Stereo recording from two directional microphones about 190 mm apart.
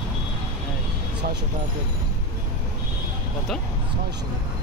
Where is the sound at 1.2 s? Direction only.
55° right (ahead or behind).